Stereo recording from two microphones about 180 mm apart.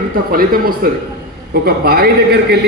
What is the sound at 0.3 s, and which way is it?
A man's voice, 55° right (ahead or behind).